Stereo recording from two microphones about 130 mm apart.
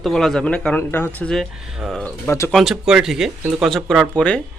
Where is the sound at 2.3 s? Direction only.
20° left (ahead or behind).